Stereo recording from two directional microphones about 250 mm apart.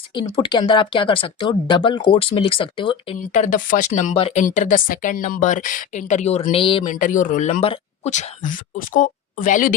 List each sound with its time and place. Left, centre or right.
0.1 s speech: centre
3.2 s speech: left
6.9 s speech: left